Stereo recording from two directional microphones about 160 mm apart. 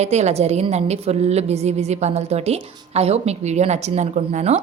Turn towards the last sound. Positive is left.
turn(degrees=-45)  # may be behind; listen again after turning